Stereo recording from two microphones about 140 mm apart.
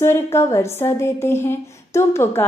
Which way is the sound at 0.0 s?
20° left (ahead or behind).